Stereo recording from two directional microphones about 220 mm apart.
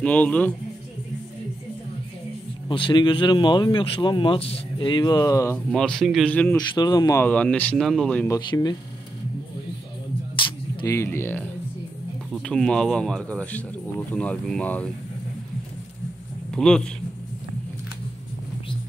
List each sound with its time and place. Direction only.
0.0 s speech: 5° left (ahead or behind)
2.7 s speech: 20° left (ahead or behind)
5.7 s speech: centre (ahead or behind)
6.5 s speech: 20° left (ahead or behind)
8.4 s speech: 20° left (ahead or behind)
10.4 s a sound: 15° left (ahead or behind)
12.3 s speech: centre (ahead or behind)
16.5 s speech: 5° left (ahead or behind)